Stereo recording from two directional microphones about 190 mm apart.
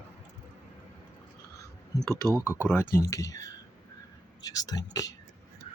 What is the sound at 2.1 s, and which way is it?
Speech, 15° right (ahead or behind).